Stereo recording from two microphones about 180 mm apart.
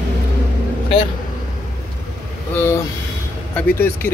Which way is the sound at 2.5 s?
10° left (ahead or behind).